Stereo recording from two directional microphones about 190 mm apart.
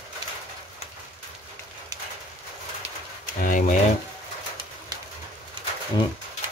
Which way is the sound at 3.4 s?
40° left (ahead or behind).